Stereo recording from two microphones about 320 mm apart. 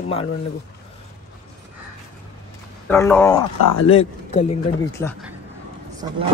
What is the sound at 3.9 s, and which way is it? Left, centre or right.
A man's voice, centre.